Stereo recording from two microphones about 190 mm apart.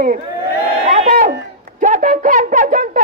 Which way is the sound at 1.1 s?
50° right (ahead or behind).